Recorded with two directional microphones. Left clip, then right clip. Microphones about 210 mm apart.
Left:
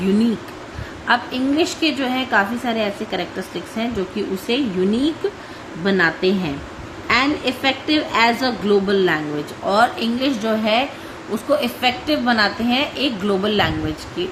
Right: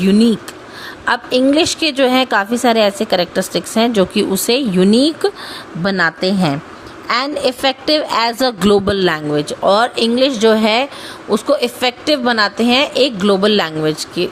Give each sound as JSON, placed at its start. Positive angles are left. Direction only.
{"t": 1.0, "sound": "a woman's voice", "side_deg": -50}